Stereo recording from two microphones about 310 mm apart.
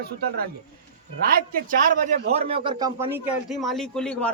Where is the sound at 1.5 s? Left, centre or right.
Right.